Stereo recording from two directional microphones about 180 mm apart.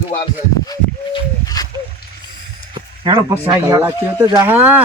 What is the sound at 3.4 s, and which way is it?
Speech, 15° right (ahead or behind).